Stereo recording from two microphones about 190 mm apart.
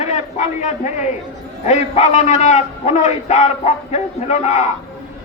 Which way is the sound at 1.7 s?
35° left (ahead or behind).